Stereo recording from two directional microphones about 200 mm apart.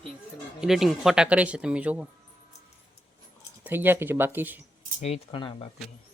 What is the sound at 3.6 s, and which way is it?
Speech, 10° right (ahead or behind).